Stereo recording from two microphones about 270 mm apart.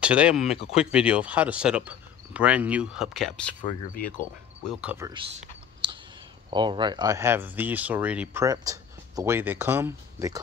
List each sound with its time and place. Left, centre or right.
0.0 s speech: centre
4.6 s speech: centre
5.4 s clicking: centre
6.5 s speech: centre